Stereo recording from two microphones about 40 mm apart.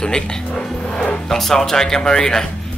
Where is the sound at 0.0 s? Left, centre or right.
Centre.